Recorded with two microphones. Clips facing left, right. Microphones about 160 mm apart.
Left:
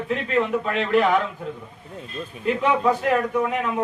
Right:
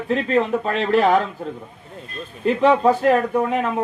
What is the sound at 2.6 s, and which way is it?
A man's voice, 40° right (ahead or behind).